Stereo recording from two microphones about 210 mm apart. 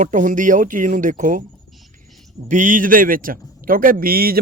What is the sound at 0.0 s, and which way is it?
A man's voice, 40° right (ahead or behind).